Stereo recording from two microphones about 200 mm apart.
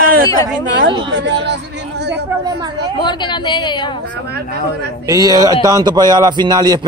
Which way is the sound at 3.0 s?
20° left (ahead or behind).